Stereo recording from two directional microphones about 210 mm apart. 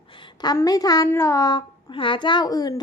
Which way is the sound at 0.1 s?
25° left (ahead or behind).